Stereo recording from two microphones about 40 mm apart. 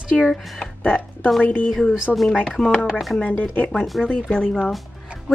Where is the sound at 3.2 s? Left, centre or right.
Left.